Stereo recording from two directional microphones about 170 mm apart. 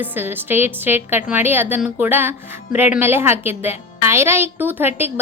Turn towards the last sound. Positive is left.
turn(degrees=-10)  # may be behind; listen again after turning